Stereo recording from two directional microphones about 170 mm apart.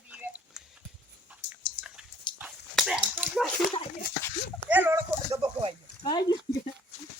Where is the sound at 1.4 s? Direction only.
85° left.